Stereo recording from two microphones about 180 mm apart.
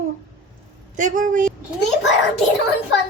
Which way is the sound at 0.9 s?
45° right (ahead or behind).